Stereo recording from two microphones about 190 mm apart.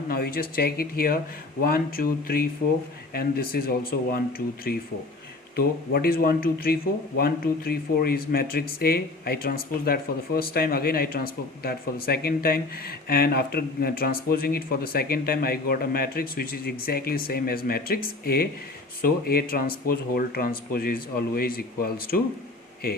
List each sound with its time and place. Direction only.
0.1 s speech: 50° left (ahead or behind)